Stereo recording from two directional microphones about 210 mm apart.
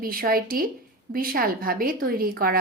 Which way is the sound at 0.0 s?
45° right (ahead or behind).